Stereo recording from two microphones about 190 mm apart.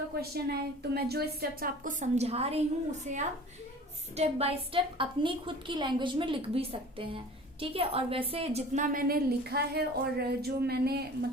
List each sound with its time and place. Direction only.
0.1 s a woman's voice: 55° right (ahead or behind); by 2.6 s 30° right (ahead or behind)
4.2 s a woman's voice: 30° right (ahead or behind); by 11.3 s 55° right (ahead or behind)